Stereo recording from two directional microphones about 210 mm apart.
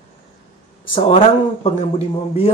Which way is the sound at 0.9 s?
25° left (ahead or behind).